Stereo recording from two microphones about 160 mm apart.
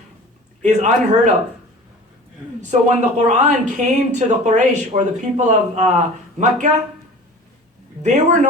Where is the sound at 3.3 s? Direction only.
50° right (ahead or behind).